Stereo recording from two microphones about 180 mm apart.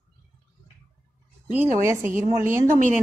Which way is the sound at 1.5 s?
10° right (ahead or behind).